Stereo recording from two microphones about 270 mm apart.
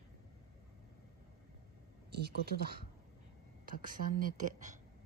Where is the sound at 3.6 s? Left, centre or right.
Right.